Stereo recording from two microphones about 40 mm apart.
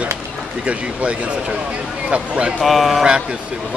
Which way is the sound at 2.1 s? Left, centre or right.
Right.